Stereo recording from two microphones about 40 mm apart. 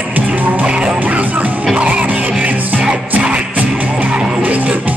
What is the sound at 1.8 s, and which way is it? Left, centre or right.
Music, right.